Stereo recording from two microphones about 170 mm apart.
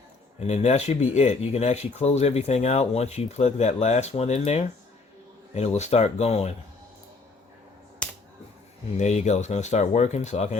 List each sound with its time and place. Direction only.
0.3 s speech: 40° left (ahead or behind)
9.0 s speech: 40° left (ahead or behind)